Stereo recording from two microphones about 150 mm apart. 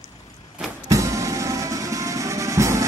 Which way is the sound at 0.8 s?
20° right (ahead or behind).